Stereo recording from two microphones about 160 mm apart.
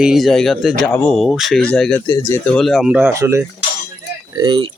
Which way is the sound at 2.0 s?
25° left (ahead or behind).